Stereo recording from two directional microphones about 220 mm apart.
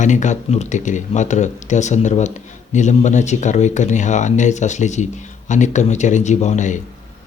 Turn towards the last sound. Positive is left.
turn(degrees=35)  # may be behind; listen again after turning